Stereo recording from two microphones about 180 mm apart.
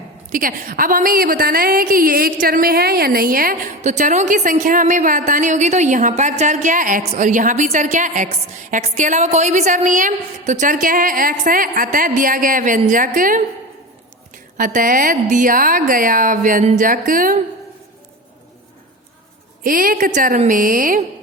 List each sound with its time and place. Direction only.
0.3 s a woman's voice: 50° right (ahead or behind)
14.6 s a woman's voice: 50° right (ahead or behind)
19.6 s a woman's voice: 50° right (ahead or behind)